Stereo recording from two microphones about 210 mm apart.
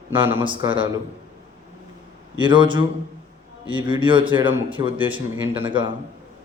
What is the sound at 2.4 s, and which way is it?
Speech, 20° right (ahead or behind).